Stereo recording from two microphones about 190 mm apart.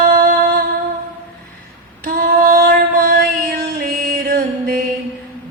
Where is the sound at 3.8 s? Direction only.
50° right (ahead or behind).